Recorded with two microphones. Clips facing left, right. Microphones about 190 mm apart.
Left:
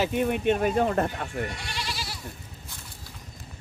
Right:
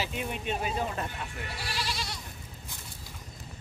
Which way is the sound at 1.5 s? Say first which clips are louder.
Even; centre (ahead or behind).